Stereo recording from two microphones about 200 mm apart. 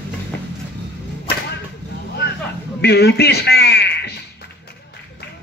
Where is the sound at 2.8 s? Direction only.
55° left (ahead or behind).